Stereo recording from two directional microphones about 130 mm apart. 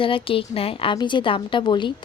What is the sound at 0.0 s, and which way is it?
A woman's voice, 45° left (ahead or behind).